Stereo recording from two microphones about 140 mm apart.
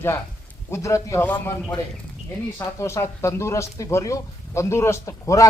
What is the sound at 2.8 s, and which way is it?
Speech, 20° left (ahead or behind).